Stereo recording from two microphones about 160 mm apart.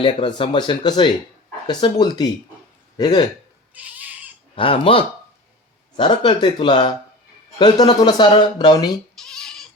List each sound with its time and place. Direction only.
0.0 s speech: 30° left (ahead or behind)
3.8 s cat: 10° right (ahead or behind)
4.5 s speech: 35° left (ahead or behind)
9.1 s goat: 5° left (ahead or behind)